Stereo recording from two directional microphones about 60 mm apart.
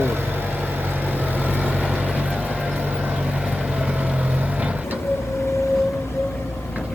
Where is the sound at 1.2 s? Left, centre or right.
Right.